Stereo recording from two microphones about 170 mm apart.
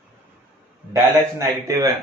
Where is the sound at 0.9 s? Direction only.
15° right (ahead or behind).